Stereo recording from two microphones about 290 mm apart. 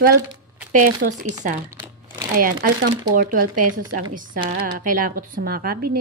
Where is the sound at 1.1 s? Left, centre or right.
Right.